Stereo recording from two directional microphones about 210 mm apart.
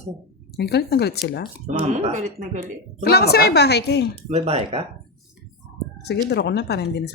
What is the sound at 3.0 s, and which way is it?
A woman's voice, 50° left (ahead or behind).